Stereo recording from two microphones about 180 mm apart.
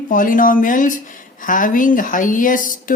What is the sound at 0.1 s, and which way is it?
A man's voice, 50° left (ahead or behind).